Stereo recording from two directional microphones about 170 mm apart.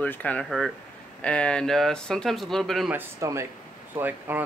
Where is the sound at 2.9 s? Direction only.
15° right (ahead or behind).